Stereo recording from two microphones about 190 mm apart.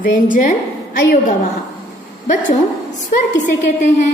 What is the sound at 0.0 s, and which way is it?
Speech, 45° left (ahead or behind).